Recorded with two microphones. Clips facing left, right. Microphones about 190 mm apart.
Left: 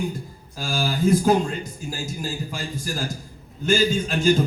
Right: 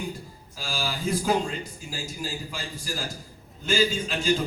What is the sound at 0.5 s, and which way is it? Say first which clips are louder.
A man's voice: left 6 dB; 45° left (ahead or behind).